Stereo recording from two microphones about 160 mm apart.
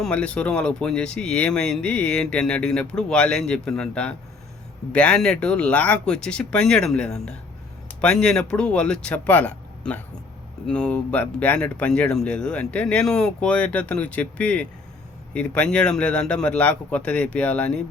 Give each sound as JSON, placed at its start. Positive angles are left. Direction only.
{"t": 0.0, "sound": "speech", "side_deg": 5}